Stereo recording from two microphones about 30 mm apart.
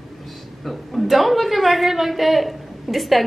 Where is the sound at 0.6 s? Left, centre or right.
Centre.